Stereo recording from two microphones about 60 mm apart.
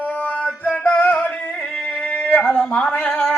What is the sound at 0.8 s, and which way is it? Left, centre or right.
Music, left.